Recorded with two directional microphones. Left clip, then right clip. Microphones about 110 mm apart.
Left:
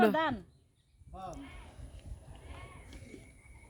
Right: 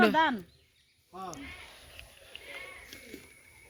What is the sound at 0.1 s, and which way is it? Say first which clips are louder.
Speech: right 5 dB; 10° right (ahead or behind).